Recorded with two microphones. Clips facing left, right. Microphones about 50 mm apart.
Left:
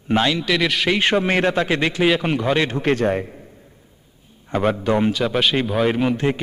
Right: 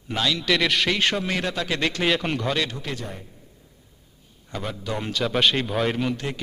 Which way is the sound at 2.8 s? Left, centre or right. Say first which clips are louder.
Left 14 dB; left.